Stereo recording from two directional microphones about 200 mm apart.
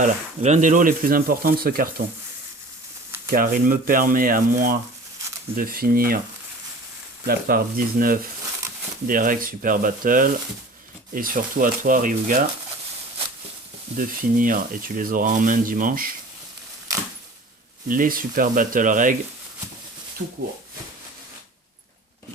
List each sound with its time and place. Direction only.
0.0 s speech: 35° right (ahead or behind)
3.2 s speech: 45° right (ahead or behind)
7.3 s speech: 45° right (ahead or behind)
13.9 s speech: 45° right (ahead or behind)
17.8 s speech: 45° right (ahead or behind)